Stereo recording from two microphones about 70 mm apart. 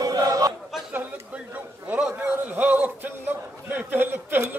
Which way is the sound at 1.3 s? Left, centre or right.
Right.